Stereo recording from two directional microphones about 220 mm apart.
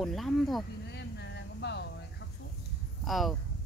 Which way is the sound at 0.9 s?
50° left (ahead or behind).